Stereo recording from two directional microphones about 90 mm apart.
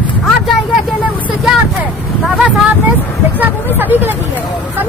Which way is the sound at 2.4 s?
15° right (ahead or behind).